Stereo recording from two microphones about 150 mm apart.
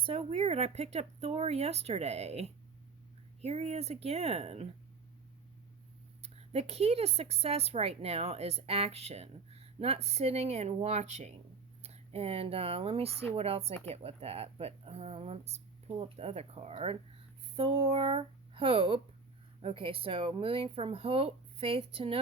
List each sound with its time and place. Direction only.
0.0 s a woman's voice: 40° right (ahead or behind)
6.2 s a woman's voice: 45° right (ahead or behind)